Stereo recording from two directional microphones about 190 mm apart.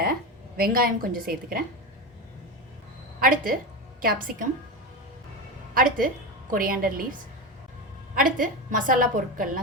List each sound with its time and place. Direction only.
0.0 s a woman's voice: 50° right (ahead or behind)
3.2 s a woman's voice: 50° right (ahead or behind)
5.7 s a woman's voice: 45° right (ahead or behind)